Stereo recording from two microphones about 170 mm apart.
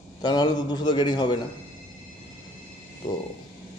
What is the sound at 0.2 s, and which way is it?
A man's voice, 25° left (ahead or behind).